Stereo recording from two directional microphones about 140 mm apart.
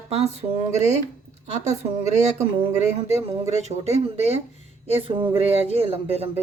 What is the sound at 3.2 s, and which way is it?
Speech, 50° right (ahead or behind).